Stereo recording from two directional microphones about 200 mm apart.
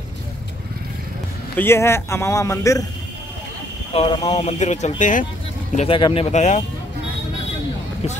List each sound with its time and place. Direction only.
1.6 s a man's voice: 10° left (ahead or behind)
3.9 s speech: 30° left (ahead or behind)
5.8 s speech: 25° left (ahead or behind)
6.3 s speech: 35° left (ahead or behind)